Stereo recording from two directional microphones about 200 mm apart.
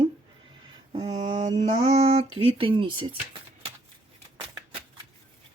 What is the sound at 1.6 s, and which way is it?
Mantra, 30° right (ahead or behind).